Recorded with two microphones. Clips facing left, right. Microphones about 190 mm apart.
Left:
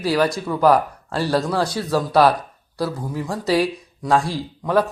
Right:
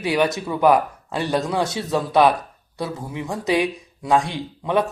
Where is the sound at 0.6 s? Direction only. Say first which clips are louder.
Even; 20° right (ahead or behind).